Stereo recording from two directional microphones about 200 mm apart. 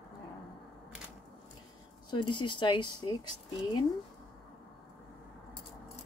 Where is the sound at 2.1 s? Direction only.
25° left (ahead or behind).